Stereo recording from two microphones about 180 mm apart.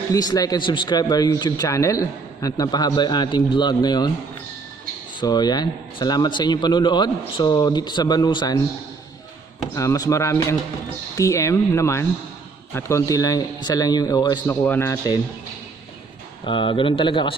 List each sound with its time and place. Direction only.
0.1 s speech: 20° left (ahead or behind)
5.2 s speech: 20° left (ahead or behind)
9.8 s speech: 20° left (ahead or behind)
14.4 s speech: 10° left (ahead or behind)
16.4 s speech: 25° left (ahead or behind)